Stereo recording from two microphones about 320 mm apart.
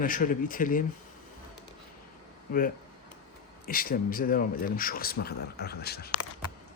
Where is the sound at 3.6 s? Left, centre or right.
Left.